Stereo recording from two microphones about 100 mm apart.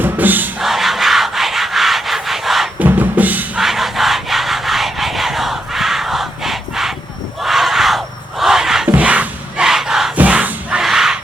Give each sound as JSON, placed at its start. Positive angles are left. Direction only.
{"t": 0.0, "sound": "music", "side_deg": -20}
{"t": 0.6, "sound": "rub", "side_deg": 0}
{"t": 2.7, "sound": "drum", "side_deg": -15}
{"t": 3.6, "sound": "rub", "side_deg": 0}
{"t": 7.4, "sound": "crowd", "side_deg": -5}
{"t": 10.2, "sound": "crowd", "side_deg": -15}